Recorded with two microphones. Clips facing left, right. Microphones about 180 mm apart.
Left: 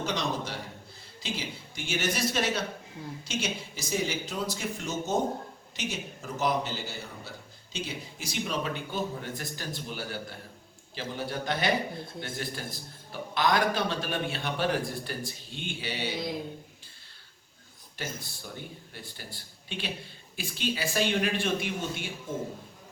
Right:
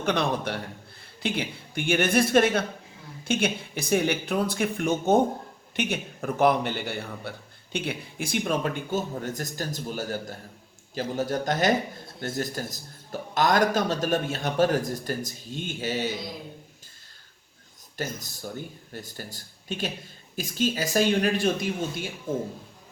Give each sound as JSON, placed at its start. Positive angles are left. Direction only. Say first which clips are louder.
{"t": 0.0, "sound": "a man's voice", "louder": "right 5 dB", "side_deg": -60}
{"t": 17.9, "sound": "a man's voice", "louder": "right 5 dB", "side_deg": -45}